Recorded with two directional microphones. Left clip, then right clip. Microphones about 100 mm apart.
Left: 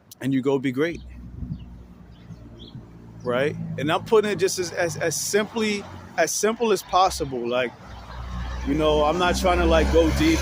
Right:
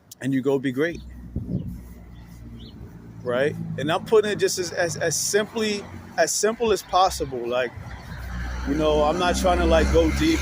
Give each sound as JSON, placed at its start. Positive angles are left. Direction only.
{"t": 0.2, "sound": "speech", "side_deg": 55}
{"t": 3.2, "sound": "speech", "side_deg": 40}